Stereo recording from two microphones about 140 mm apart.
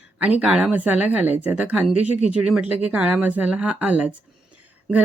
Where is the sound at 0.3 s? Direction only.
10° right (ahead or behind).